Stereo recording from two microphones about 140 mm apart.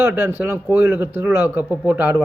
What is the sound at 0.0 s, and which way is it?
Speech, 15° right (ahead or behind).